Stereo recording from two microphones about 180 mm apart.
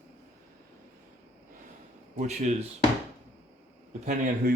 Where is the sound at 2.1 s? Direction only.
40° right (ahead or behind).